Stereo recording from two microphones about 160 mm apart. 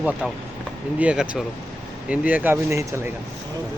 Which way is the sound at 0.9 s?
5° right (ahead or behind).